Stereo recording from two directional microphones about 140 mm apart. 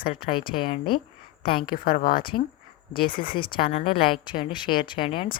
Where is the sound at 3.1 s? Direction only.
90° left.